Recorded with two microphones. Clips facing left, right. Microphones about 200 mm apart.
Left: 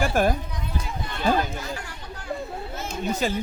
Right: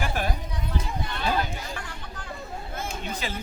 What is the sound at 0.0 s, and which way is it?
Run, 45° left (ahead or behind).